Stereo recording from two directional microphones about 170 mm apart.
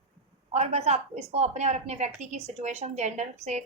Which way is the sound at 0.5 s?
40° right (ahead or behind).